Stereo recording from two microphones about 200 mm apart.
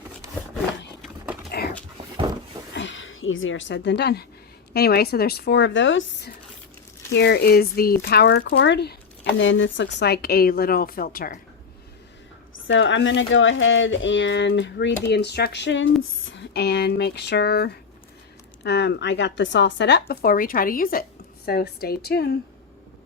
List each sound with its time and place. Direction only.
1.5 s a sound: 55° left (ahead or behind)
2.7 s a woman's voice: 65° left (ahead or behind)
9.4 s a woman's voice: 70° left (ahead or behind); by 11.3 s 45° left (ahead or behind)
12.6 s speech: 70° left (ahead or behind)